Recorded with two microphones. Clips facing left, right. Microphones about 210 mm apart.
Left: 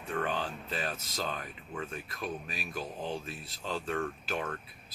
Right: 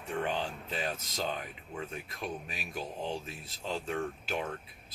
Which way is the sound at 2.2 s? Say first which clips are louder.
Left 1 dB; 25° right (ahead or behind).